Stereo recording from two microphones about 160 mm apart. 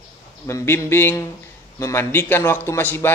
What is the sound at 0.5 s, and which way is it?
Speech, 20° left (ahead or behind).